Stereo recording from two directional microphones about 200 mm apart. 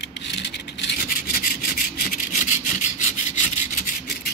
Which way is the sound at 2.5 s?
35° left (ahead or behind).